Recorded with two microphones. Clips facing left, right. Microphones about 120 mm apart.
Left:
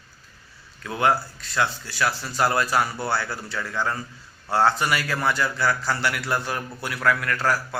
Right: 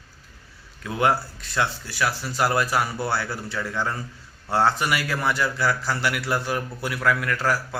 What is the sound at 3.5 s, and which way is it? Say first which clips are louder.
A man's voice: left 1 dB; 20° right (ahead or behind).